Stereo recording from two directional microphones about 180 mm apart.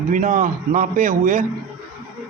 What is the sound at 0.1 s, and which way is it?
Speech, 45° right (ahead or behind).